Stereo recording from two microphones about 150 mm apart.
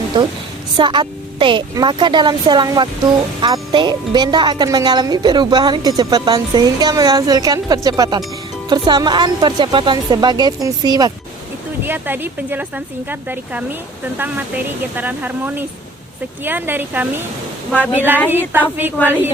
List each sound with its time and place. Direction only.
0.1 s a woman's voice: 30° right (ahead or behind)
11.9 s speech: 15° right (ahead or behind)
14.9 s speech: 10° right (ahead or behind)